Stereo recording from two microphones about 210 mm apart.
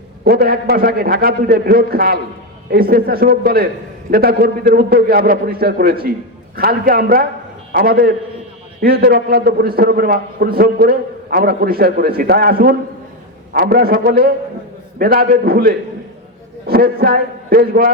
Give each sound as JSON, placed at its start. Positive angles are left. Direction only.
{"t": 0.3, "sound": "a man's voice", "side_deg": -45}